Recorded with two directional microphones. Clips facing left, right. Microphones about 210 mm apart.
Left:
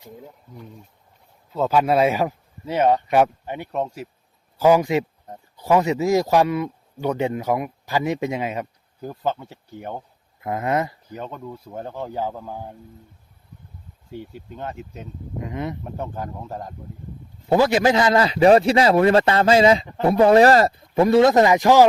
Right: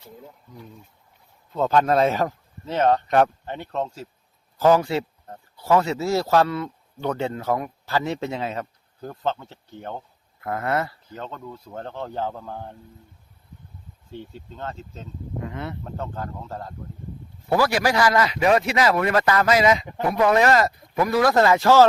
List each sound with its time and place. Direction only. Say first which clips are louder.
1.5 s speech: left 1 dB; 5° left (ahead or behind)
14.1 s speech: left 3 dB; 10° left (ahead or behind)